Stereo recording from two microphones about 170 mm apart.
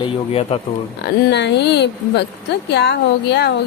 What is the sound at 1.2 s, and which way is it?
Speech, 85° left.